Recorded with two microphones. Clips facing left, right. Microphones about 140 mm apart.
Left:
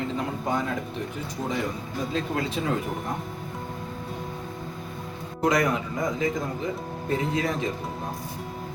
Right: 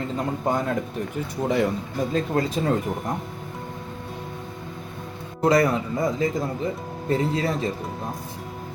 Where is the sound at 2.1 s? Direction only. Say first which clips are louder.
Right 4 dB; 40° right (ahead or behind).